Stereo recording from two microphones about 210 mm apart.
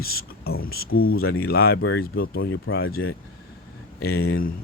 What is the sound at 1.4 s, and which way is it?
Speech, 50° left (ahead or behind).